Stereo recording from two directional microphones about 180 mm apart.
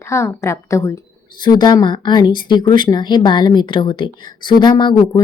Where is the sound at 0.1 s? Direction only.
15° left (ahead or behind).